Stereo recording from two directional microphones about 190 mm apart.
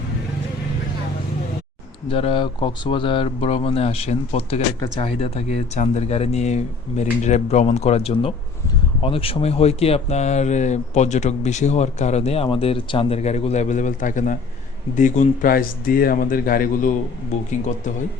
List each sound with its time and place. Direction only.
2.0 s speech: 30° left (ahead or behind)